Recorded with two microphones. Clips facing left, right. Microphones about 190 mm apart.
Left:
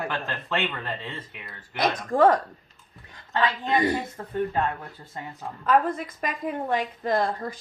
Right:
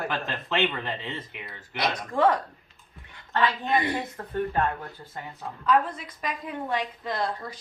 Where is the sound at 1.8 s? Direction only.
45° left (ahead or behind).